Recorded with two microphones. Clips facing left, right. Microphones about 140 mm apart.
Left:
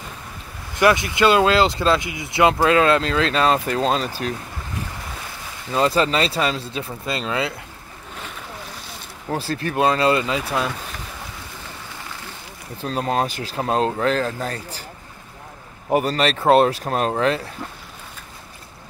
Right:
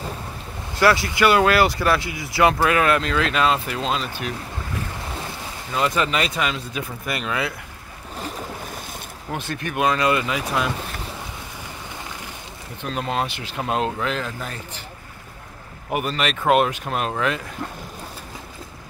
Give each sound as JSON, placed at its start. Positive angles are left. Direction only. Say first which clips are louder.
{"t": 0.7, "sound": "speech", "louder": "left 1 dB", "side_deg": 20}
{"t": 5.7, "sound": "speech", "louder": "left 3 dB", "side_deg": 30}
{"t": 8.2, "sound": "boat", "louder": "right 6 dB", "side_deg": -40}
{"t": 9.3, "sound": "speech", "louder": "left 4 dB", "side_deg": 35}
{"t": 12.8, "sound": "speech", "louder": "left 3 dB", "side_deg": 35}
{"t": 15.9, "sound": "speech", "louder": "left 5 dB", "side_deg": 35}